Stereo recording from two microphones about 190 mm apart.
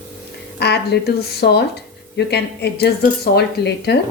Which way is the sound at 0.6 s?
60° left (ahead or behind).